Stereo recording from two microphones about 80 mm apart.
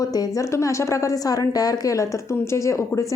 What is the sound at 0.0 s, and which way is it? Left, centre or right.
A woman's voice, left.